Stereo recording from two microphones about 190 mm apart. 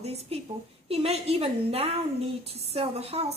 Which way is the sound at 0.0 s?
30° right (ahead or behind).